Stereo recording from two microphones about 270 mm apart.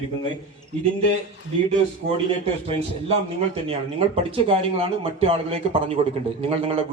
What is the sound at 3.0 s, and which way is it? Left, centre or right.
Speech, right.